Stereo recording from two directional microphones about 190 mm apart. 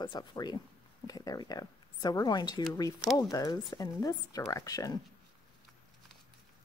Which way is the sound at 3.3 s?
20° left (ahead or behind).